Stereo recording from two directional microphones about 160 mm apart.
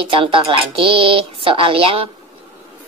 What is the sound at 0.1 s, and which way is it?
A woman's voice, 35° right (ahead or behind).